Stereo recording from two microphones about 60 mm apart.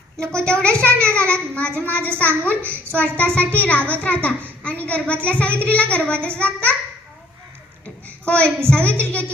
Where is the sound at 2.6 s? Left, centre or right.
Right.